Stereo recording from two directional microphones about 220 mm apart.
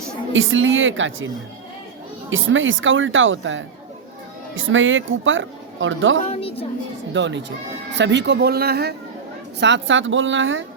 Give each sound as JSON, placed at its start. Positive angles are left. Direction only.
{"t": 0.3, "sound": "speech", "side_deg": -60}
{"t": 2.3, "sound": "speech", "side_deg": -60}
{"t": 6.3, "sound": "a woman's voice", "side_deg": 25}
{"t": 7.1, "sound": "speech", "side_deg": -55}